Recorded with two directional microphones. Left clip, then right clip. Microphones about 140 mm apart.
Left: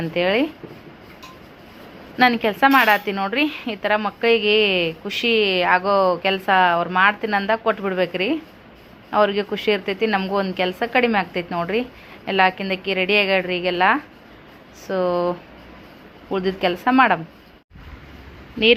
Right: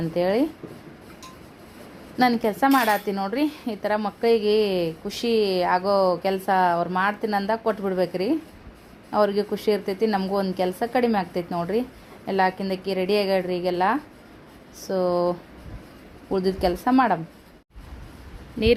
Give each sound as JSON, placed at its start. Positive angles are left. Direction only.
{"t": 0.0, "sound": "a woman's voice", "side_deg": -25}
{"t": 2.1, "sound": "a woman's voice", "side_deg": -25}
{"t": 15.0, "sound": "speech", "side_deg": 5}
{"t": 16.3, "sound": "a woman's voice", "side_deg": -30}